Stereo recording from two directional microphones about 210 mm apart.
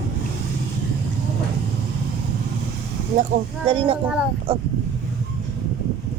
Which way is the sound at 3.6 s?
25° right (ahead or behind).